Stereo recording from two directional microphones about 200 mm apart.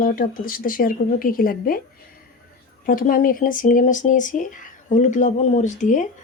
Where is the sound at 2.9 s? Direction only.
45° left (ahead or behind).